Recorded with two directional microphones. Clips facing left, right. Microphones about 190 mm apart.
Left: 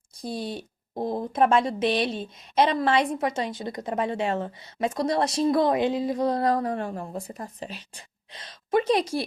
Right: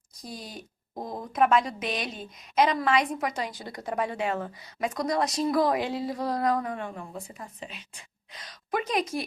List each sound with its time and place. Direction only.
0.1 s a woman's voice: 30° left (ahead or behind)